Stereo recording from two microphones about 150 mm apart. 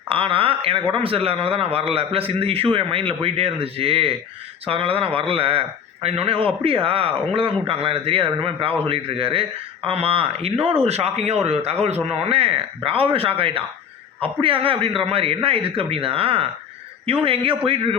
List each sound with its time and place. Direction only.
0.1 s a man's voice: 35° right (ahead or behind)